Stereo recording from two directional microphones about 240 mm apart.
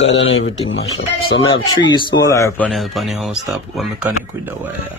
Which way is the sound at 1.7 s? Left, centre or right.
Centre.